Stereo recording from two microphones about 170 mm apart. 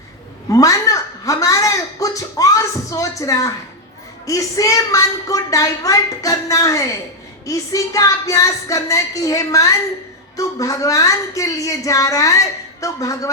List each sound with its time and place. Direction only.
0.4 s a woman's voice: 20° left (ahead or behind)